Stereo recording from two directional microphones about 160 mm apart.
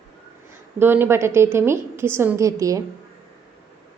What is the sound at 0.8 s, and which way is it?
A woman's voice, 15° right (ahead or behind).